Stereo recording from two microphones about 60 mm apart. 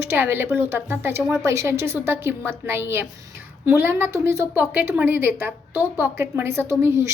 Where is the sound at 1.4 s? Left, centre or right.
Right.